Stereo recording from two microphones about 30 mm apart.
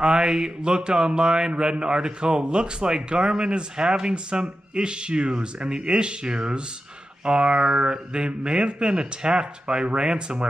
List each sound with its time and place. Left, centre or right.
0.0 s a man's voice: right